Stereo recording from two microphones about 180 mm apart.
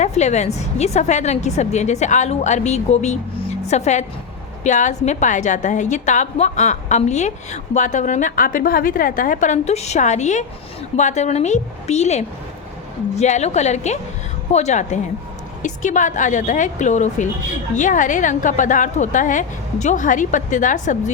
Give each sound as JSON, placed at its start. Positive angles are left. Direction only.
{"t": 0.0, "sound": "a woman's voice", "side_deg": 40}